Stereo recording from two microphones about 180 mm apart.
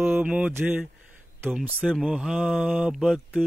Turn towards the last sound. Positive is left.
turn(degrees=0)  # may be behind; listen again after turning